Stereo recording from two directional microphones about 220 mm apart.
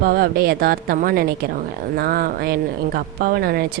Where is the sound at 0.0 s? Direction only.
45° right (ahead or behind).